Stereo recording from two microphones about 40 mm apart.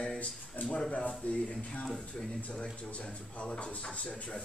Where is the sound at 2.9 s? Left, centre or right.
Left.